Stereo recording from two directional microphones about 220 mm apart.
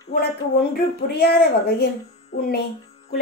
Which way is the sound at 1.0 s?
45° left (ahead or behind).